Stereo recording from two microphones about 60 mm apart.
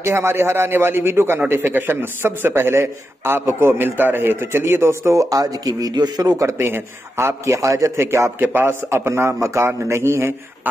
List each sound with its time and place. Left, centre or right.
0.0 s a man's voice: right
5.1 s speech: right
6.4 s a man's voice: right
8.0 s a man's voice: right
8.4 s a man's voice: right
8.9 s a man's voice: right